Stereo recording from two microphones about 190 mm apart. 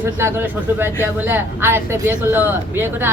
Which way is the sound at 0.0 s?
10° right (ahead or behind).